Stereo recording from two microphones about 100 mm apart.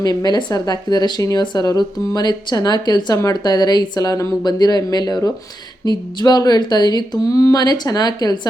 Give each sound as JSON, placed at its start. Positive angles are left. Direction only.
{"t": 0.0, "sound": "speech", "side_deg": 40}